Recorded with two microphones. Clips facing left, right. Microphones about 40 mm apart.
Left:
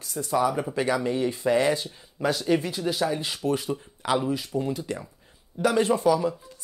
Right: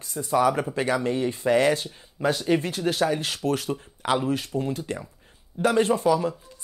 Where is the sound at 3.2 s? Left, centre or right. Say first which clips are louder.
Right 1 dB; right.